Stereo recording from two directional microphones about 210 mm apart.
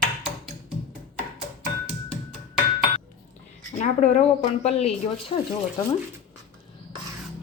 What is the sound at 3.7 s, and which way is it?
Speech, 35° left (ahead or behind).